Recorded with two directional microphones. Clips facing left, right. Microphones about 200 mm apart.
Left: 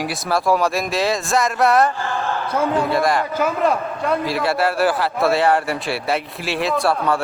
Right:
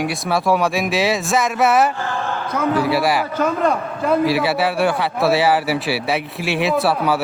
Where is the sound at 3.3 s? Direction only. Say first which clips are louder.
Right 1 dB; 5° left (ahead or behind).